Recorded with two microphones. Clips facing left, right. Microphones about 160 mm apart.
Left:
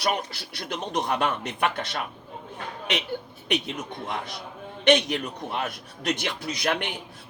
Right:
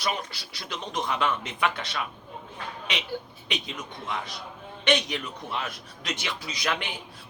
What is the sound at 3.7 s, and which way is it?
A man's voice, 50° left (ahead or behind).